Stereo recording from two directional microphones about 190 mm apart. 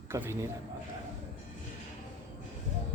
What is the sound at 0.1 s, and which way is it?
Speech, 15° right (ahead or behind).